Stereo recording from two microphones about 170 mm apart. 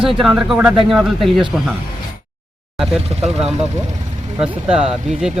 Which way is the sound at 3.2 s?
40° right (ahead or behind).